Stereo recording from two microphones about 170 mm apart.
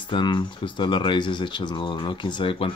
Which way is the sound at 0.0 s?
25° left (ahead or behind).